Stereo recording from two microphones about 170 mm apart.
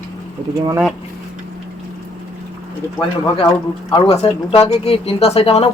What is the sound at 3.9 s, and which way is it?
Speech, 30° left (ahead or behind).